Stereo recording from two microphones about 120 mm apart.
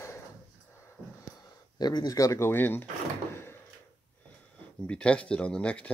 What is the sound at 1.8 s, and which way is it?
Speech, 35° left (ahead or behind).